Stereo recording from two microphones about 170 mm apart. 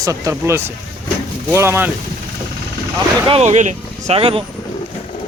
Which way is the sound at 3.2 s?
40° right (ahead or behind).